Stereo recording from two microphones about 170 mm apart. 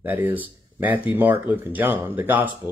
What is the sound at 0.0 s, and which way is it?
Speech, 10° right (ahead or behind).